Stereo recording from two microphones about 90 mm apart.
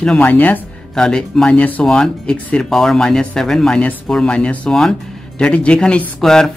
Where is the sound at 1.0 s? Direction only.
5° left (ahead or behind).